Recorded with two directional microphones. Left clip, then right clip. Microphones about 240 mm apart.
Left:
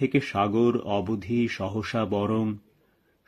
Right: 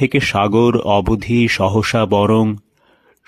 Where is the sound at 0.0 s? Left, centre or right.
Right.